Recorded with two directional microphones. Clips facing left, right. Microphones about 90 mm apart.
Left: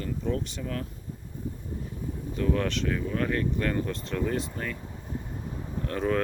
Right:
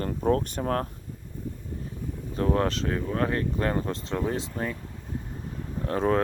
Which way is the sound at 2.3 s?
35° right (ahead or behind).